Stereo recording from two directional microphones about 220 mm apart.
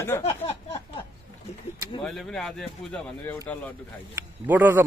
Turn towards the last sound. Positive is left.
turn(degrees=-10)  # may be behind; listen again after turning